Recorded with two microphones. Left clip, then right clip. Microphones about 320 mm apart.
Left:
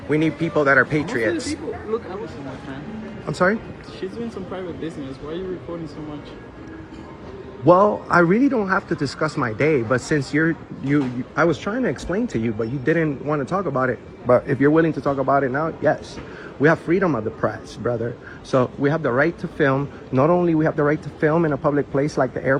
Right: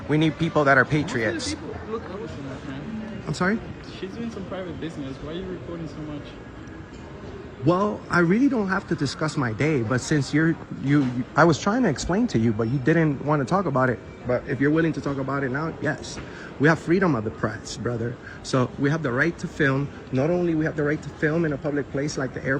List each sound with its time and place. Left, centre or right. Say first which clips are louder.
0.1 s a man's voice: left 2 dB; centre
3.2 s a man's voice: left 6 dB; centre
7.6 s a man's voice: left 8 dB; centre
21.2 s a man's voice: left 5 dB; centre
21.4 s speech: left 6 dB; left
22.0 s a man's voice: left 7 dB; centre